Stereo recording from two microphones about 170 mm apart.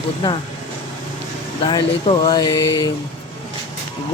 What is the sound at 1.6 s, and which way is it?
Speech, 30° left (ahead or behind).